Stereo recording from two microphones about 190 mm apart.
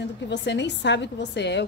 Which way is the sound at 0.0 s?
65° left (ahead or behind).